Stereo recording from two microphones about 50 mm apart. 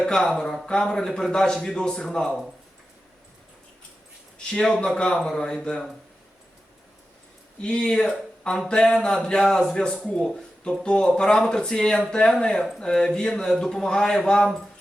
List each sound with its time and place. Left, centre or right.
0.0 s a man's voice: centre
4.5 s a man's voice: centre
7.6 s a man's voice: centre